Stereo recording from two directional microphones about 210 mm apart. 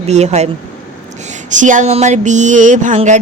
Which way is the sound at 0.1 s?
30° right (ahead or behind).